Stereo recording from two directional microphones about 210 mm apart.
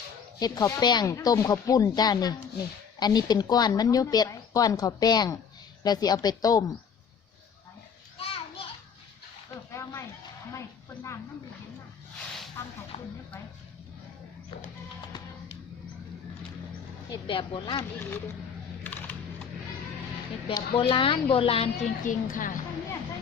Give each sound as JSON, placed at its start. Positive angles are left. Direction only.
{"t": 0.3, "sound": "a woman's voice", "side_deg": 20}
{"t": 8.2, "sound": "children playing", "side_deg": 25}
{"t": 9.7, "sound": "a sound", "side_deg": 15}
{"t": 10.5, "sound": "speech", "side_deg": 15}
{"t": 12.6, "sound": "speech", "side_deg": 10}
{"t": 12.9, "sound": "a woman's voice", "side_deg": 30}
{"t": 17.2, "sound": "a woman's voice", "side_deg": 25}
{"t": 18.8, "sound": "a sound", "side_deg": 10}
{"t": 20.5, "sound": "a woman's voice", "side_deg": 25}